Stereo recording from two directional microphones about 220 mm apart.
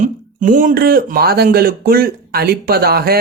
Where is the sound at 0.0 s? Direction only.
35° right (ahead or behind).